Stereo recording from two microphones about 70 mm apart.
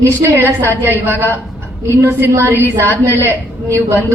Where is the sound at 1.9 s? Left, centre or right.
Right.